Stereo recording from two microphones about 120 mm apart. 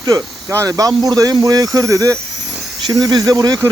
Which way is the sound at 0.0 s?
30° right (ahead or behind).